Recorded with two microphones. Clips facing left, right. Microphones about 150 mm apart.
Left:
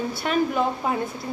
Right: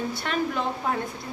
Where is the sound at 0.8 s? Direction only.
15° left (ahead or behind).